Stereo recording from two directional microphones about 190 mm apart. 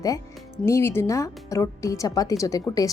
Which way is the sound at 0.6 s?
15° left (ahead or behind).